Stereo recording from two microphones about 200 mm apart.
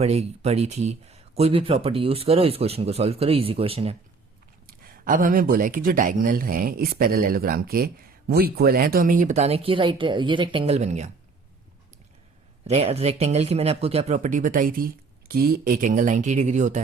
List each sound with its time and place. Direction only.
0.0 s speech: 30° right (ahead or behind)
4.8 s speech: 45° right (ahead or behind)
12.6 s speech: 30° right (ahead or behind)